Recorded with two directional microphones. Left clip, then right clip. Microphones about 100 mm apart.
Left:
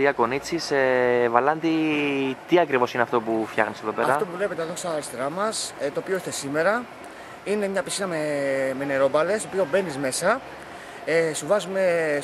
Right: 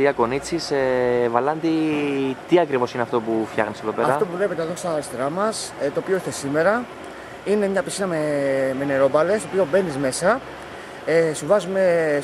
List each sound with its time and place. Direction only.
0.0 s speech: 20° left (ahead or behind)
4.4 s speech: 5° left (ahead or behind)
9.8 s speech: centre (ahead or behind)